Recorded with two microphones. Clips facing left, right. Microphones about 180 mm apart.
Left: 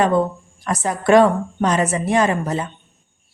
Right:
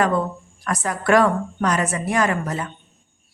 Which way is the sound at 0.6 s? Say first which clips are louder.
Left 3 dB; 20° left (ahead or behind).